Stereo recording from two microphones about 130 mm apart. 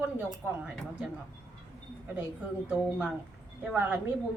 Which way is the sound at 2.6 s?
10° right (ahead or behind).